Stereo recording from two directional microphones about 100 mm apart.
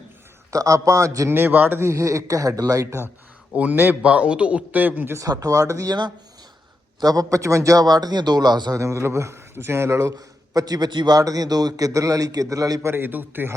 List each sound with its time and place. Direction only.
0.5 s a man's voice: 35° right (ahead or behind)
1.4 s speech: 20° right (ahead or behind)
3.5 s a man's voice: 15° right (ahead or behind)
5.1 s a man's voice: 35° right (ahead or behind)
8.8 s a man's voice: 30° right (ahead or behind)
12.9 s speech: 20° right (ahead or behind)